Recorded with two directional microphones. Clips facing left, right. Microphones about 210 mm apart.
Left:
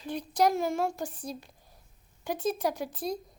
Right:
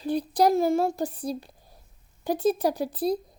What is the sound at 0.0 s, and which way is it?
A woman's voice, 35° right (ahead or behind).